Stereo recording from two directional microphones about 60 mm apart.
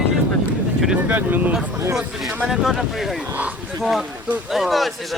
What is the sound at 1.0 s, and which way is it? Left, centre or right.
Speech, right.